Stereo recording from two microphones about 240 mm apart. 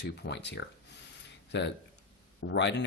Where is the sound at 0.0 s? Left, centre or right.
Left.